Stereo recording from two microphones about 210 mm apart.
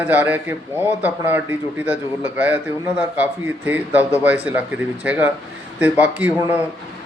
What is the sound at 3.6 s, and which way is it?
Speech, 10° right (ahead or behind).